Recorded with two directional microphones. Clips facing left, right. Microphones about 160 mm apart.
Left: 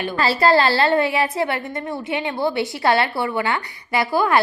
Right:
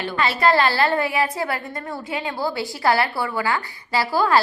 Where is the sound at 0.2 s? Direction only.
30° left (ahead or behind).